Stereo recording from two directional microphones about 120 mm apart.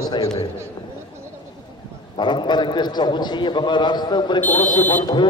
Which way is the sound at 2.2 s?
40° left (ahead or behind).